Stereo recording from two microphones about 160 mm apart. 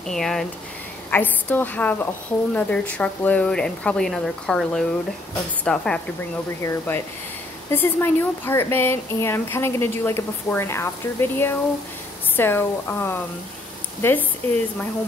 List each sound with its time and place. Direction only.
0.0 s a woman's voice: 5° left (ahead or behind)
6.6 s a woman's voice: 15° left (ahead or behind)